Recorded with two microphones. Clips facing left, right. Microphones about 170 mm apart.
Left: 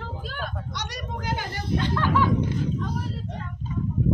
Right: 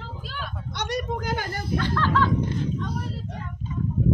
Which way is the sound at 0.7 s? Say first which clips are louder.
Right 6 dB; 55° right (ahead or behind).